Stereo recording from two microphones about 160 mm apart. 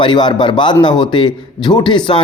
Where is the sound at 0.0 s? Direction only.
30° left (ahead or behind).